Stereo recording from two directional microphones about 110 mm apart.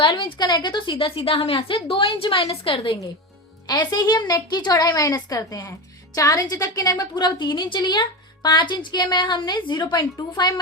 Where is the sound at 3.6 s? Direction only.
40° left (ahead or behind).